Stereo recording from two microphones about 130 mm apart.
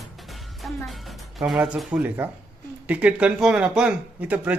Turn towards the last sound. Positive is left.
turn(degrees=-10)  # may be behind; listen again after turning